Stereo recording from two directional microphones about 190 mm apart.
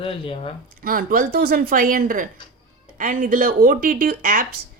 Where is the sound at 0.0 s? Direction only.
30° left (ahead or behind).